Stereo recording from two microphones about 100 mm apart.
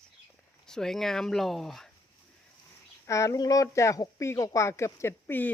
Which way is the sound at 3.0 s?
30° left (ahead or behind).